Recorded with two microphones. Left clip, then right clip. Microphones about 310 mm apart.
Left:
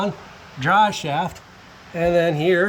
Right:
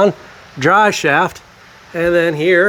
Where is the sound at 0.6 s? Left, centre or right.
Centre.